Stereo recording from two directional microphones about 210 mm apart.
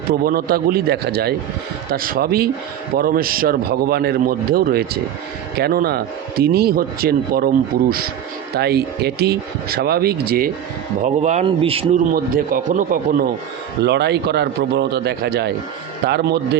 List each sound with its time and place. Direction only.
0.3 s speech: 45° right (ahead or behind)
11.0 s speech: 35° right (ahead or behind)
12.1 s speech: 40° right (ahead or behind)
13.8 s speech: 55° right (ahead or behind)